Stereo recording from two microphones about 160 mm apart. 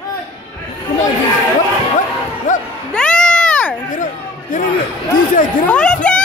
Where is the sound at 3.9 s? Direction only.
55° left (ahead or behind).